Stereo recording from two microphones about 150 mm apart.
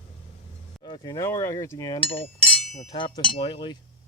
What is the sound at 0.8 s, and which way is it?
Speech, 30° left (ahead or behind).